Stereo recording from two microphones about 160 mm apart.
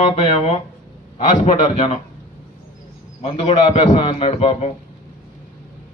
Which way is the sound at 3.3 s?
30° left (ahead or behind).